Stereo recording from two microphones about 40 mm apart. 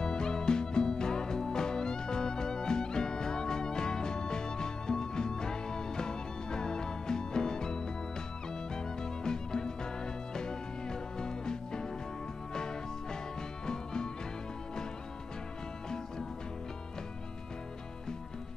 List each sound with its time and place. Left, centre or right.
0.0 s music: centre
13.7 s music: centre